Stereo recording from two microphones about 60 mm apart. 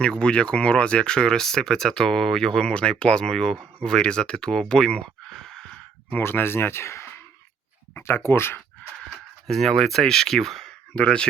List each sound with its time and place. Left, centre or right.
0.0 s speech: centre
6.1 s speech: left
7.9 s speech: left
9.5 s speech: centre
10.9 s speech: centre